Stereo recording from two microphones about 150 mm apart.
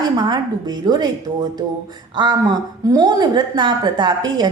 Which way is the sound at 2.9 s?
25° right (ahead or behind).